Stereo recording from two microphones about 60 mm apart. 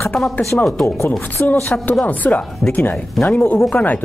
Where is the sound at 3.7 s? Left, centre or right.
Left.